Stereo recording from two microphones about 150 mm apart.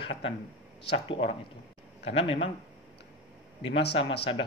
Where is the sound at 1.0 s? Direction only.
35° left (ahead or behind).